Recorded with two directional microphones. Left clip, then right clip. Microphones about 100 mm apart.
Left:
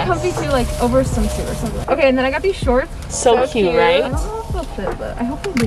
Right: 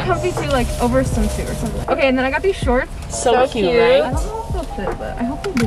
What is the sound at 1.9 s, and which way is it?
Speech, 5° left (ahead or behind).